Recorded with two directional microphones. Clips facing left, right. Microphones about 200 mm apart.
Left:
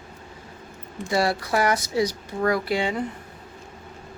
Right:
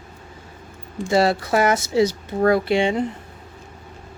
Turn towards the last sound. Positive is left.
turn(degrees=-25)  # may be behind; listen again after turning